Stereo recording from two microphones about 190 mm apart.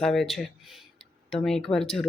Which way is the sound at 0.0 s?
Centre (ahead or behind).